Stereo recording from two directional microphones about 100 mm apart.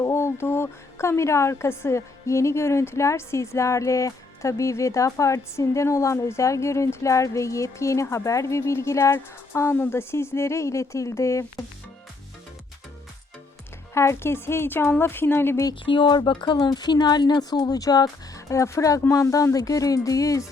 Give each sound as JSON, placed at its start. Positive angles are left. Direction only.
{"t": 0.0, "sound": "speech", "side_deg": 25}
{"t": 13.9, "sound": "speech", "side_deg": 30}
{"t": 15.9, "sound": "speech", "side_deg": 50}